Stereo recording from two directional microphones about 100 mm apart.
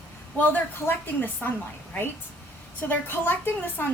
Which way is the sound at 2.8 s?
20° left (ahead or behind).